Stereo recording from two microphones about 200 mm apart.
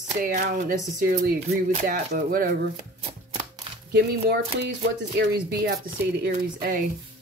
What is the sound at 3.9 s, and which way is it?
Speech, 55° right (ahead or behind).